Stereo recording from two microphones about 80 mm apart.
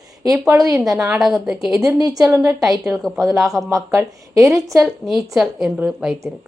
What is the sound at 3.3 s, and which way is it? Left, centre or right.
A child's voice, right.